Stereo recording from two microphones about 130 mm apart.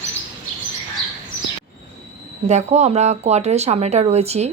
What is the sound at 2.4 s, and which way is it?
Speech, 60° right (ahead or behind).